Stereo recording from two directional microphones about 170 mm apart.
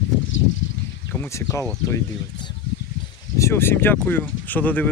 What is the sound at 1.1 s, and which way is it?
Speech, 15° left (ahead or behind).